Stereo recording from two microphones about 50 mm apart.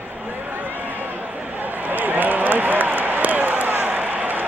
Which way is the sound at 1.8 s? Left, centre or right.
Right.